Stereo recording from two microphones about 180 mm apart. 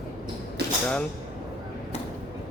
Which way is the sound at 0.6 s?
65° right (ahead or behind).